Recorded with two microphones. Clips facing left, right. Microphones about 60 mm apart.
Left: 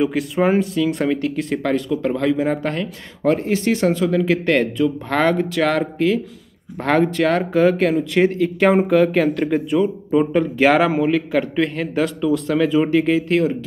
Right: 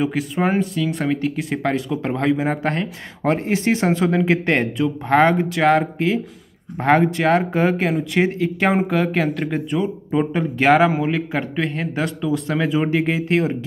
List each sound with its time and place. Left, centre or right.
0.0 s speech: centre
7.8 s speech: centre